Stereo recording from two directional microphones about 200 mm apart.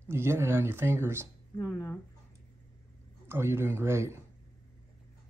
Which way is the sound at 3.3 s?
10° right (ahead or behind).